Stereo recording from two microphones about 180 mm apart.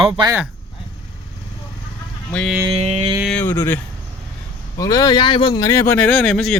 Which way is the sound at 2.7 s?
35° right (ahead or behind).